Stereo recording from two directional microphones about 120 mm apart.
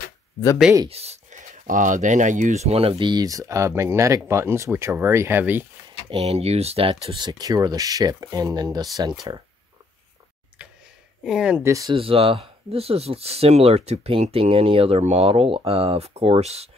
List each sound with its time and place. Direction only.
0.8 s speech: 60° right (ahead or behind); by 5.7 s 15° right (ahead or behind)
6.0 s speech: 55° right (ahead or behind)
7.2 s speech: 35° right (ahead or behind)
10.6 s a sound: 10° right (ahead or behind)
11.2 s speech: 5° right (ahead or behind)
11.6 s speech: 25° right (ahead or behind)
11.9 s speech: 50° right (ahead or behind)